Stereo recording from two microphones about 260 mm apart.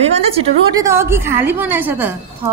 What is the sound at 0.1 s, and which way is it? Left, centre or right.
Speech, right.